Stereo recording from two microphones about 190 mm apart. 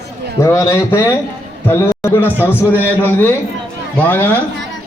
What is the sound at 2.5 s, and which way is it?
A man's voice, 10° left (ahead or behind).